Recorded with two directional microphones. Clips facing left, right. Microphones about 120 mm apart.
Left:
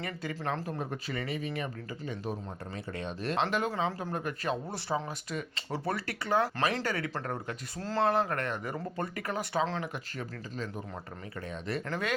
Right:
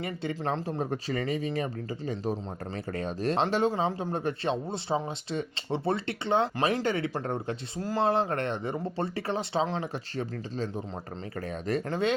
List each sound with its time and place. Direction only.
0.0 s speech: 25° right (ahead or behind)
0.8 s speech: 35° right (ahead or behind)
7.8 s speech: 15° right (ahead or behind); by 10.8 s 30° right (ahead or behind)
11.9 s speech: 25° right (ahead or behind)